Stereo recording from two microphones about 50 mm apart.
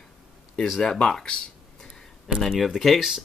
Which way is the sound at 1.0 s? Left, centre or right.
Centre.